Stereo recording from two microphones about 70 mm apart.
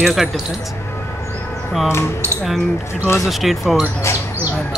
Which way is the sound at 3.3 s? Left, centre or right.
Centre.